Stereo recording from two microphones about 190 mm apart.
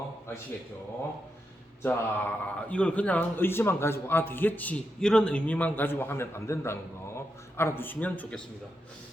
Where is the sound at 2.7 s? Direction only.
5° left (ahead or behind).